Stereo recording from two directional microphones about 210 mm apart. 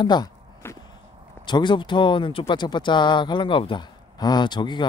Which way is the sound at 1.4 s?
20° left (ahead or behind).